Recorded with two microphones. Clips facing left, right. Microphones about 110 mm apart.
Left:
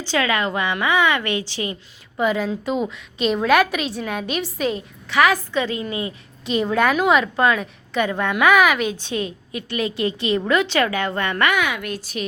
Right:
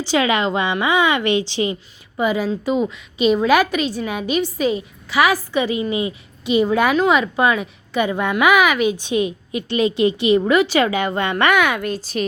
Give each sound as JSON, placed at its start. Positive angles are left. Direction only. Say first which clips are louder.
{"t": 0.0, "sound": "a woman's voice", "louder": "right 3 dB", "side_deg": -15}
{"t": 2.1, "sound": "a woman's voice", "louder": "right 1 dB", "side_deg": -5}
{"t": 6.4, "sound": "a woman's voice", "louder": "right 3 dB", "side_deg": -5}
{"t": 9.0, "sound": "a woman's voice", "louder": "right 6 dB", "side_deg": -15}
{"t": 11.5, "sound": "speech", "louder": "right 5 dB", "side_deg": -55}
{"t": 11.8, "sound": "a woman's voice", "louder": "right 5 dB", "side_deg": -30}